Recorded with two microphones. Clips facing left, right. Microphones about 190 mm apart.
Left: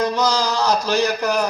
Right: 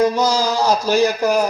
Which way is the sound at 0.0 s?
10° right (ahead or behind).